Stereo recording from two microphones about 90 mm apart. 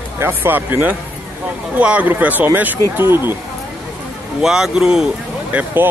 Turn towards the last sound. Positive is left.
turn(degrees=-20)  # may be behind; listen again after turning